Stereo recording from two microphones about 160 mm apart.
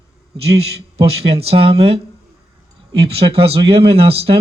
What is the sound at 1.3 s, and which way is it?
Speech, 40° right (ahead or behind).